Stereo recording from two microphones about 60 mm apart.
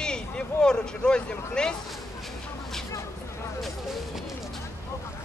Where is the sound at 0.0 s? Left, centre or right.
Centre.